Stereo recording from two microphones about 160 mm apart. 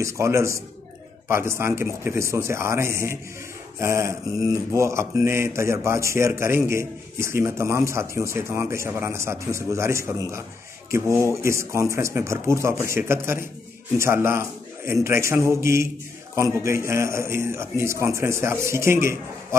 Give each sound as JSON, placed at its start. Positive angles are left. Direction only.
{"t": 0.0, "sound": "speech", "side_deg": -20}